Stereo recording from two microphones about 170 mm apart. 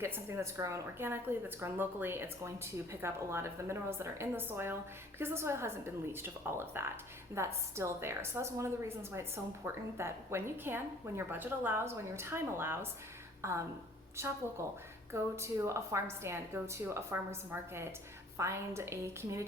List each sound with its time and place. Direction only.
0.0 s a woman's voice: 15° right (ahead or behind)